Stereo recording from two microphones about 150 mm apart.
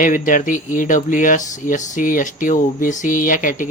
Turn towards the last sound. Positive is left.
turn(degrees=60)  # may be behind; listen again after turning